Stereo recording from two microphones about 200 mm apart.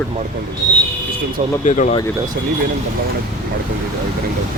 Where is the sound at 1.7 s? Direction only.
40° left (ahead or behind).